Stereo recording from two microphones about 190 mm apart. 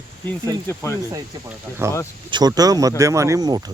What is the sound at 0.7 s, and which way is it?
Speech, 15° left (ahead or behind).